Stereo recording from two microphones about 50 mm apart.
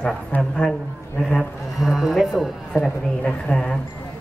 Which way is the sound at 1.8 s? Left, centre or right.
Centre.